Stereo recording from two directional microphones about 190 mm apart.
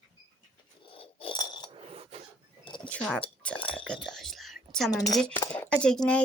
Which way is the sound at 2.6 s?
25° left (ahead or behind).